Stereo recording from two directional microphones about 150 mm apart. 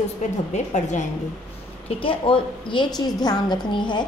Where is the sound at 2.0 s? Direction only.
35° left (ahead or behind).